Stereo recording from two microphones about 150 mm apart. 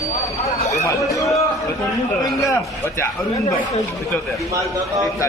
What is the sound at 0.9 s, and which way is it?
Speech, 20° left (ahead or behind).